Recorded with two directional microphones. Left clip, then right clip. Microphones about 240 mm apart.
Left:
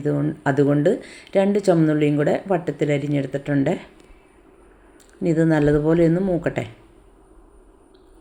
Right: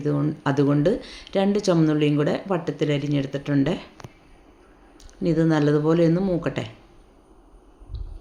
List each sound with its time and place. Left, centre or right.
0.0 s speech: centre
5.2 s speech: centre